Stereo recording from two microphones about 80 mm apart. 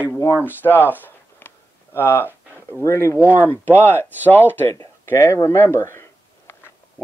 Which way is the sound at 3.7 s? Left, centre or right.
Left.